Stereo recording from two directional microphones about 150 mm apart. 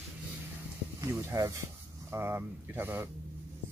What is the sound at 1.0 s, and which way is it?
Speech, 20° right (ahead or behind).